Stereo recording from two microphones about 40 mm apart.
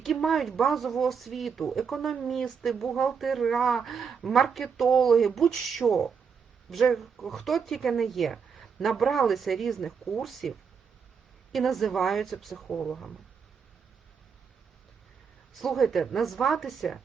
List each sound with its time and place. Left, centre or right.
0.0 s speech: centre
15.5 s speech: centre